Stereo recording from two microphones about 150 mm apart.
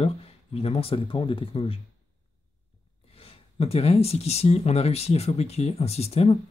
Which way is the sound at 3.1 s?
40° left (ahead or behind).